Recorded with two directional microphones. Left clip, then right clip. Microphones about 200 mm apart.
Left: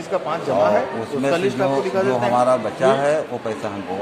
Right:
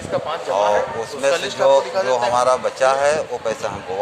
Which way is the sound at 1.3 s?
30° right (ahead or behind).